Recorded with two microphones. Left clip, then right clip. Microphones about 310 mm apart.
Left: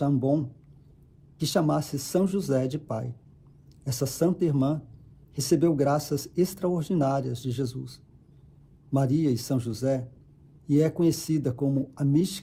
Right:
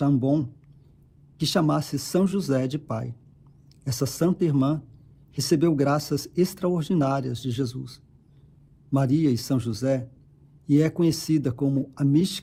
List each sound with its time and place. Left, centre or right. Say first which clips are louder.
0.0 s speech: right 2 dB; right